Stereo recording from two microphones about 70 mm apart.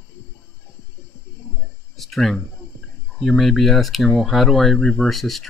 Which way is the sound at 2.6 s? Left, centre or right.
Left.